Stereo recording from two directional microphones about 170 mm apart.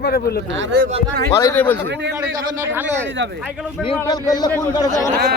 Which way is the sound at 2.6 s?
15° right (ahead or behind).